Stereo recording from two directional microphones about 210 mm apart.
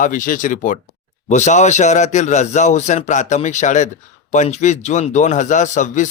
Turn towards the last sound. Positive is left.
turn(degrees=35)  # may be behind; listen again after turning